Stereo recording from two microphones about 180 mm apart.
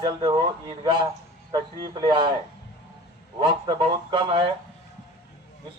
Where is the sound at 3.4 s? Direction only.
25° right (ahead or behind).